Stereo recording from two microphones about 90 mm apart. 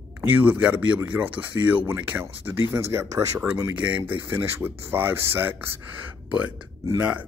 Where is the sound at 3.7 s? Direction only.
15° right (ahead or behind).